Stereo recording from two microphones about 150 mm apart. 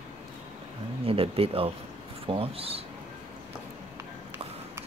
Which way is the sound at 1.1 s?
40° right (ahead or behind).